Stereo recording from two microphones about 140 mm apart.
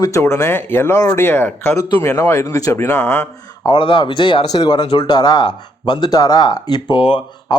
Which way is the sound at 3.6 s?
35° left (ahead or behind).